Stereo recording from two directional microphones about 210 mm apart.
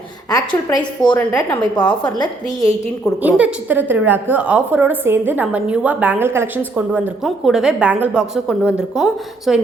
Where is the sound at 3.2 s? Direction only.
5° right (ahead or behind).